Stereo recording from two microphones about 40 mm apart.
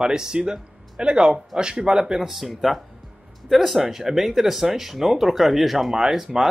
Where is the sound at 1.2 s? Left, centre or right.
Centre.